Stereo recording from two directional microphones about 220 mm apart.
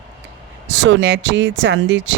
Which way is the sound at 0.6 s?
55° right (ahead or behind).